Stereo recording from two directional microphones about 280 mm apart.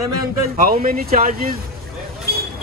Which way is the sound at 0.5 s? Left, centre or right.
Right.